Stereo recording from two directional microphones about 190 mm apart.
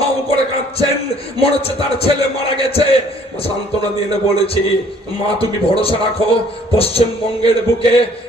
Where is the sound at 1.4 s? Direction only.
30° left (ahead or behind).